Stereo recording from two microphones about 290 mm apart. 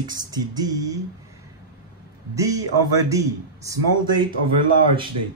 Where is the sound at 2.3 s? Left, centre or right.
Centre.